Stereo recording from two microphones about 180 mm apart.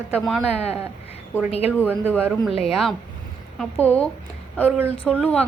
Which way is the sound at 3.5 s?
5° left (ahead or behind).